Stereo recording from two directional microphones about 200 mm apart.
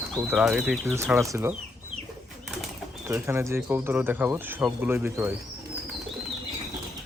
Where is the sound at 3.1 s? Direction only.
10° right (ahead or behind).